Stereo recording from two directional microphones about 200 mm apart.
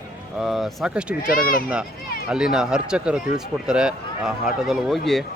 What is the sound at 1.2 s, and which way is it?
Speech, 45° left (ahead or behind).